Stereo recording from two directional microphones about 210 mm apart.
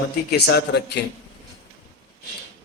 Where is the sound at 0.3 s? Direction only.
50° left (ahead or behind).